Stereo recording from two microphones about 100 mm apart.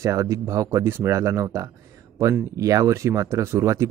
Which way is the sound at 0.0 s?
35° right (ahead or behind).